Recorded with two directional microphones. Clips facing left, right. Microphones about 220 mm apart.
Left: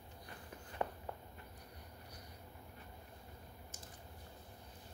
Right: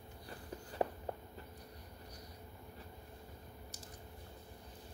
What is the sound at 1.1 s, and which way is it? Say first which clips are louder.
Walk: right 4 dB; 40° right (ahead or behind).